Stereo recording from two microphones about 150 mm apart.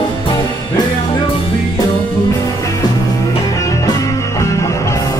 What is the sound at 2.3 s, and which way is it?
Music, 20° left (ahead or behind).